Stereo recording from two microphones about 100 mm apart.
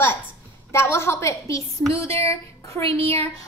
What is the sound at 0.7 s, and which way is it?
A woman's voice, 25° left (ahead or behind).